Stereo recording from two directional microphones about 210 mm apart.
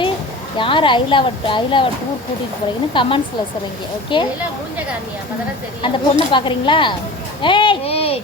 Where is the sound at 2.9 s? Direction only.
25° left (ahead or behind).